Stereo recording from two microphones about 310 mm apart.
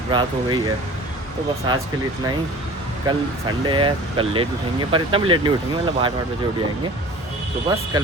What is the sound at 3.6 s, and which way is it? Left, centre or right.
Speech, centre.